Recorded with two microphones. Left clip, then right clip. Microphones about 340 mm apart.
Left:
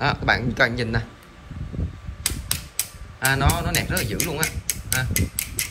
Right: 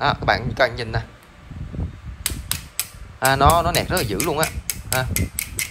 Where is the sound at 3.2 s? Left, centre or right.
Centre.